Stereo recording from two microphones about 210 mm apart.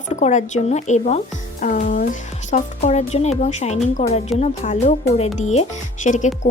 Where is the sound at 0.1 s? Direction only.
35° left (ahead or behind).